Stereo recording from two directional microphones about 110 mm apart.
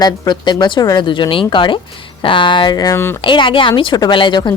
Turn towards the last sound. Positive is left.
turn(degrees=45)  # may be behind; listen again after turning